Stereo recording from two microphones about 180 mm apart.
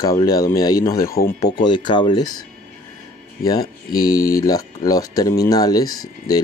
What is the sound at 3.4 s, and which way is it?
Speech, 55° left (ahead or behind).